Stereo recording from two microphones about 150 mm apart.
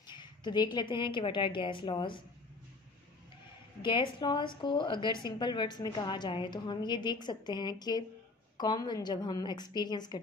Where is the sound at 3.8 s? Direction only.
30° left (ahead or behind).